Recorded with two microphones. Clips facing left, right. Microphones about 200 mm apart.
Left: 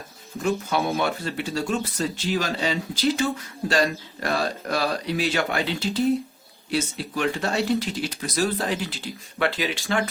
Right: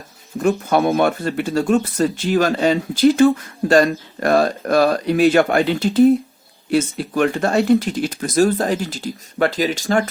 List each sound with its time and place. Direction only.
0.3 s speech: 55° right (ahead or behind)